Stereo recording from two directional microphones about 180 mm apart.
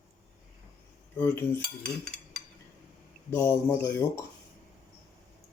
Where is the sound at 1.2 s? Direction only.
10° left (ahead or behind).